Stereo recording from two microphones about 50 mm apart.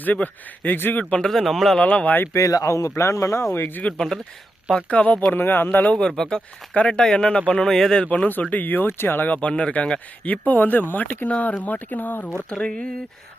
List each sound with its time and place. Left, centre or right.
0.0 s speech: left
1.1 s speech: centre
1.8 s speech: left
2.3 s a man's voice: left
3.5 s speech: left
3.9 s speech: centre
4.7 s speech: left
5.3 s speech: left
6.0 s speech: centre
8.0 s speech: left
9.3 s speech: left
10.2 s speech: left
12.3 s speech: centre